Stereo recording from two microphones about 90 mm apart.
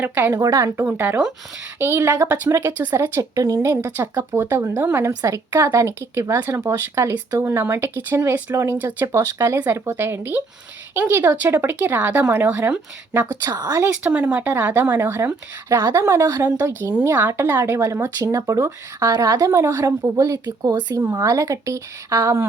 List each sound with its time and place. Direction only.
0.0 s speech: 20° right (ahead or behind)
0.3 s speech: 45° right (ahead or behind)
0.8 s speech: 25° right (ahead or behind)
3.9 s speech: 20° right (ahead or behind)
8.8 s speech: 20° right (ahead or behind)
9.1 s speech: 35° right (ahead or behind)
13.4 s speech: 45° right (ahead or behind)
14.0 s speech: 20° right (ahead or behind)
15.8 s speech: 50° right (ahead or behind)
16.0 s speech: 40° right (ahead or behind); by 17.6 s 25° right (ahead or behind)
17.6 s speech: 35° right (ahead or behind)